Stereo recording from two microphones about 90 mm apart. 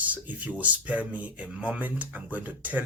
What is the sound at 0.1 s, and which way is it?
Speech, 20° right (ahead or behind).